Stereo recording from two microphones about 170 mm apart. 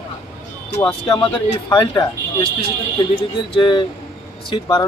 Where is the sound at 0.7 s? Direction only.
30° left (ahead or behind).